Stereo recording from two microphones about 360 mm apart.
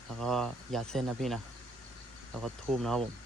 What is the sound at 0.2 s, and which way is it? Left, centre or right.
Speech, centre.